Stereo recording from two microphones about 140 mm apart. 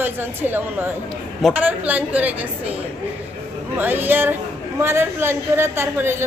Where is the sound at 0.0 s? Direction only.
15° right (ahead or behind).